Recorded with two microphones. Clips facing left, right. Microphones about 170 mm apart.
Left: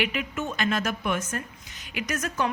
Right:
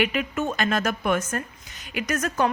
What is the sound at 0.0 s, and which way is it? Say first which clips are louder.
A woman's voice: right 4 dB; 45° right (ahead or behind).